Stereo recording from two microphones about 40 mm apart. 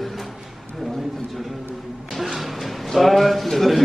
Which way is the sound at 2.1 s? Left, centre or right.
Centre.